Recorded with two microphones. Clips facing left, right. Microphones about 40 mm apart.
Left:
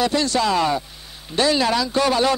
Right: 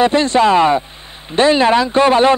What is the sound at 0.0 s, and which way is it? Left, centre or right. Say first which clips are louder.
Speech: right 8 dB; right.